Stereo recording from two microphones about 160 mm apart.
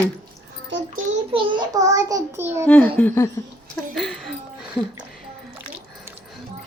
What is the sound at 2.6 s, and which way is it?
Speech, 10° left (ahead or behind).